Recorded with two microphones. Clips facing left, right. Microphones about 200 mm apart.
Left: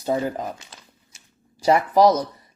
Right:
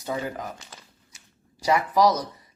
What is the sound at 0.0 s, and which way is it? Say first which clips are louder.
Speech: left 6 dB; 35° left (ahead or behind).